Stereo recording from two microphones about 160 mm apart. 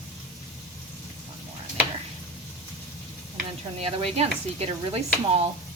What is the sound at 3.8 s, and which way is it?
Speech, 40° right (ahead or behind).